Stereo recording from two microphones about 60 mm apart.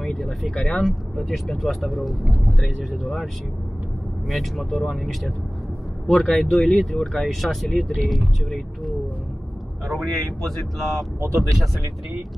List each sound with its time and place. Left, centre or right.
0.0 s speech: centre
4.3 s speech: centre
11.1 s speech: right